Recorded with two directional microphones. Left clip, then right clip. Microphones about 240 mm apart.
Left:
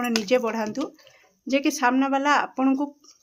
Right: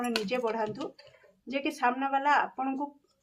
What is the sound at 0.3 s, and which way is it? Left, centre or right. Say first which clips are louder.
A woman's voice: left 7 dB; left.